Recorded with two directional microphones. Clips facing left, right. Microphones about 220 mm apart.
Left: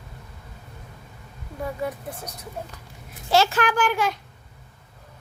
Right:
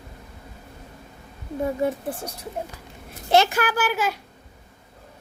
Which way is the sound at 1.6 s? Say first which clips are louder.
Right 5 dB; 25° right (ahead or behind).